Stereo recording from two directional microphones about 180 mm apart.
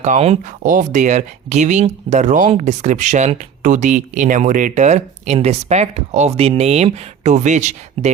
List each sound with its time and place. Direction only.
0.0 s speech: 40° right (ahead or behind)